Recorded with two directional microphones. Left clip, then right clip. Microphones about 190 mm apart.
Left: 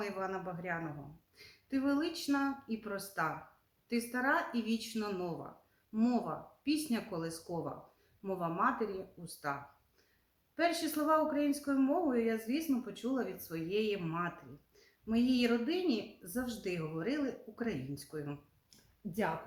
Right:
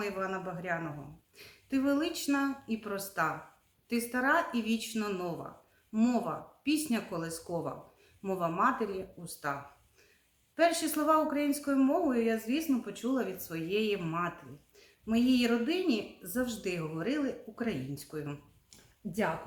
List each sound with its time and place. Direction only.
0.0 s speech: 25° right (ahead or behind)